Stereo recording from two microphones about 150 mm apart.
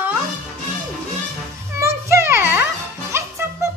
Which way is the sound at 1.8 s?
20° right (ahead or behind).